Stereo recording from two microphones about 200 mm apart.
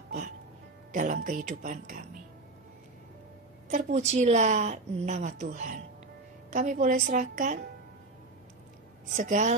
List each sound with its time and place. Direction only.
0.9 s a woman's voice: 40° right (ahead or behind)
3.7 s a woman's voice: 35° right (ahead or behind)
9.1 s a woman's voice: 40° right (ahead or behind)